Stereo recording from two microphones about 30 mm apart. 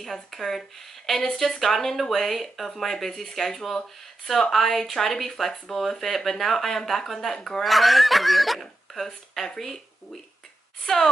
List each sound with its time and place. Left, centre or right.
0.0 s speech: centre
7.6 s speech: centre
10.9 s a woman's voice: centre